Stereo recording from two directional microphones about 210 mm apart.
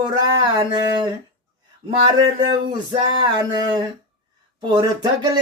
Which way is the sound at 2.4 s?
20° right (ahead or behind).